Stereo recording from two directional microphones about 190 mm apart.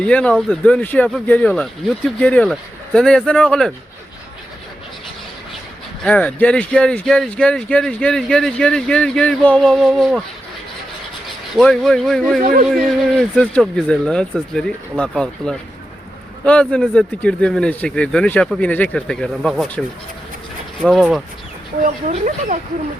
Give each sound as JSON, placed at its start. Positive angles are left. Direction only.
{"t": 0.0, "sound": "speech", "side_deg": 5}
{"t": 6.0, "sound": "speech", "side_deg": 5}
{"t": 11.5, "sound": "speech", "side_deg": 0}
{"t": 12.4, "sound": "speech", "side_deg": -45}
{"t": 12.7, "sound": "speech", "side_deg": 0}
{"t": 20.8, "sound": "speech", "side_deg": 0}
{"t": 22.0, "sound": "speech", "side_deg": -40}